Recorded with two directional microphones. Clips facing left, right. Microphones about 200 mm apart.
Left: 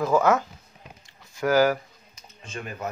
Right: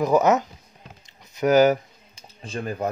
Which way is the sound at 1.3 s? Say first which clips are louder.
Right 4 dB; 20° right (ahead or behind).